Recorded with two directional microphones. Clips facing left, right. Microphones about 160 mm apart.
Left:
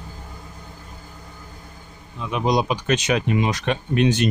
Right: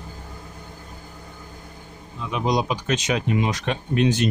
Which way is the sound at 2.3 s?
65° left (ahead or behind).